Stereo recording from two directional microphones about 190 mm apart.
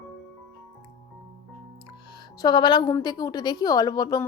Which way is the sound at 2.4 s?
25° left (ahead or behind).